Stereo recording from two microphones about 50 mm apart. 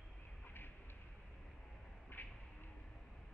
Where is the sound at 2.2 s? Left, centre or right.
Left.